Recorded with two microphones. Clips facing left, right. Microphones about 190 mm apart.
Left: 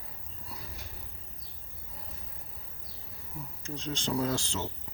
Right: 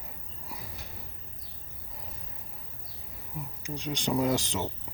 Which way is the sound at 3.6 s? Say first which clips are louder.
Right 2 dB; 15° right (ahead or behind).